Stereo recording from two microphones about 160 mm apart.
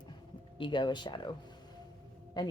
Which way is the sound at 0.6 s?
30° left (ahead or behind).